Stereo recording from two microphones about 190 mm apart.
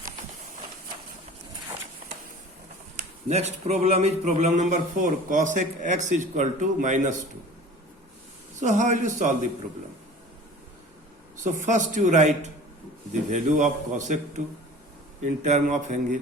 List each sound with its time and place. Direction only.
2.9 s a sound: 45° right (ahead or behind)
3.3 s speech: 35° right (ahead or behind)
8.5 s speech: 40° right (ahead or behind)
11.3 s speech: 40° right (ahead or behind)